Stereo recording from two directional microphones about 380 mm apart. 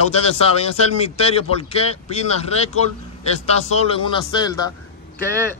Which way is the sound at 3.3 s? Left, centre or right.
Centre.